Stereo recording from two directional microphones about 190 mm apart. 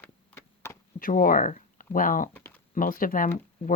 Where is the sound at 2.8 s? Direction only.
50° left (ahead or behind).